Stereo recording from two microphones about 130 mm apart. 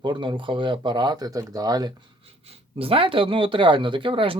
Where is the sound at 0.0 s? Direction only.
40° right (ahead or behind).